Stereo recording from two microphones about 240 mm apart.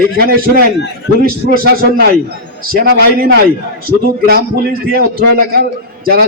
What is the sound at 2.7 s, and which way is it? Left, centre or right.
A man's voice, right.